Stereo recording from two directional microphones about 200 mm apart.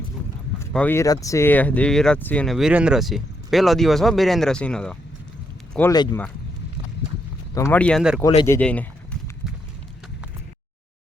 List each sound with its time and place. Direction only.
0.7 s speech: 10° left (ahead or behind)
5.9 s speech: 20° left (ahead or behind)
7.5 s speech: 10° left (ahead or behind)
8.4 s a sound: 10° left (ahead or behind)